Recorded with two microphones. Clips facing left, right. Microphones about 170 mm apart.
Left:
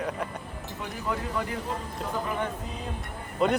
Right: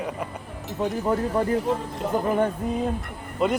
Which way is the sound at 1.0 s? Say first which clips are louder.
Right 6 dB; 40° right (ahead or behind).